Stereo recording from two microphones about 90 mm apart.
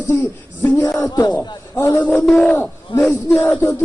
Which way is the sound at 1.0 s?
45° left (ahead or behind).